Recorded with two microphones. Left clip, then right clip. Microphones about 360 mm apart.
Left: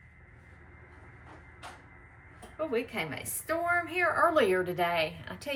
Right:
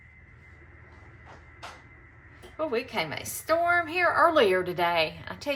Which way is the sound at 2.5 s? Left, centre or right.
Centre.